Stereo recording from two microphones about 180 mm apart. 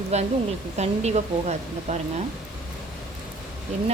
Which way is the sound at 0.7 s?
40° right (ahead or behind).